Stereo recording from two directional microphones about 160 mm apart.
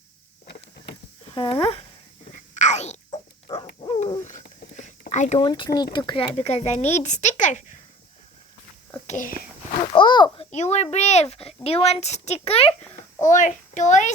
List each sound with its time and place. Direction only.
0.4 s a sound: 90° left
1.2 s speech: 35° left (ahead or behind)
2.6 s a sound: 45° left (ahead or behind)
3.8 s owl: 30° left (ahead or behind)
4.2 s a sound: 50° left (ahead or behind)
5.4 s speech: 30° left (ahead or behind)
6.3 s a child's voice: 40° left (ahead or behind)
9.0 s speech: 50° left (ahead or behind)
9.9 s a child's voice: 30° left (ahead or behind)
10.5 s a child's voice: 45° left (ahead or behind)
13.2 s a child's voice: 50° left (ahead or behind)